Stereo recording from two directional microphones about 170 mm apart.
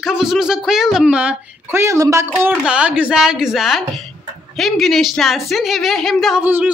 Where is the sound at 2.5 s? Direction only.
5° right (ahead or behind).